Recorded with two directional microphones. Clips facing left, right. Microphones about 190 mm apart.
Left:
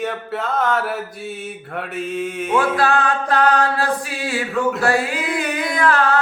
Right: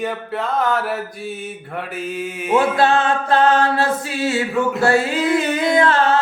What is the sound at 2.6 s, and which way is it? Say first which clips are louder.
Music: right 2 dB; 25° right (ahead or behind).